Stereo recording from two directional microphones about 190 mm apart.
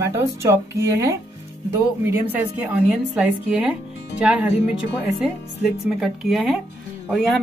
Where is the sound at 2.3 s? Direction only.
5° right (ahead or behind).